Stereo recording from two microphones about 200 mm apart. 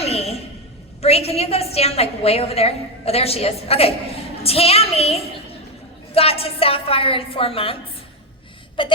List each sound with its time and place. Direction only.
0.0 s a sound: 30° left (ahead or behind)
1.0 s a woman's voice: 30° left (ahead or behind)
8.8 s a woman's voice: 25° left (ahead or behind)